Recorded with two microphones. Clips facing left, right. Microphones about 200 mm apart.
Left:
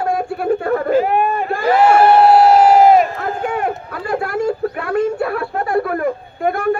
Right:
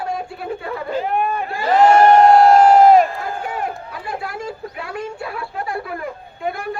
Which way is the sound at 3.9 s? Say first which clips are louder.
Left 8 dB; 60° left (ahead or behind).